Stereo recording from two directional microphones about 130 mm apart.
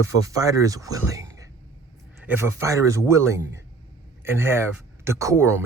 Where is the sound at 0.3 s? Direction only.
25° right (ahead or behind).